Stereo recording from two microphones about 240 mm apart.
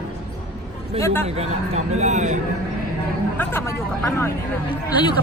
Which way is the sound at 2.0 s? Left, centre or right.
Right.